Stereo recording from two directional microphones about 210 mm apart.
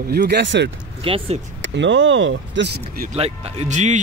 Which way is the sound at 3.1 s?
30° right (ahead or behind).